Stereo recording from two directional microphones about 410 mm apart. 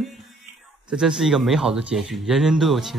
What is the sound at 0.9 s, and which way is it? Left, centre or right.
Speech, centre.